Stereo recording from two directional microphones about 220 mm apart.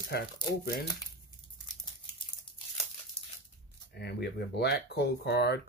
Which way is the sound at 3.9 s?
50° left (ahead or behind).